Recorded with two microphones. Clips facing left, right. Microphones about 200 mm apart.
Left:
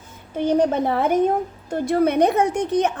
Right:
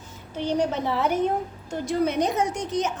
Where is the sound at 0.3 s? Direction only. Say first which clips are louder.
Left 6 dB; 50° left (ahead or behind).